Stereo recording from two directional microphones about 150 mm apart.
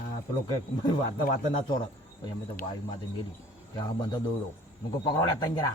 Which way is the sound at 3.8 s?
25° left (ahead or behind).